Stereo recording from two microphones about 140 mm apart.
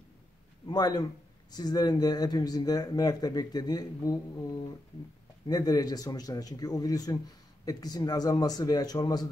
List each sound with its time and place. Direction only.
0.7 s a man's voice: 25° left (ahead or behind)
5.5 s speech: 30° left (ahead or behind)